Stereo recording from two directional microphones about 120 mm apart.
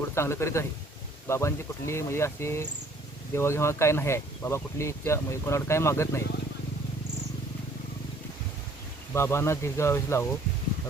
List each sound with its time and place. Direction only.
0.1 s speech: 20° left (ahead or behind)
9.1 s speech: 20° left (ahead or behind)